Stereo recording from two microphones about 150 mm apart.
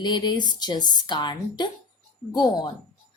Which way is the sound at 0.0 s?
30° left (ahead or behind).